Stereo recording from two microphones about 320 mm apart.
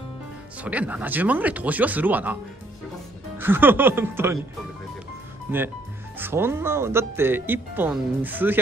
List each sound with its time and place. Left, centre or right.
0.6 s speech: centre
3.3 s speech: centre
6.1 s speech: centre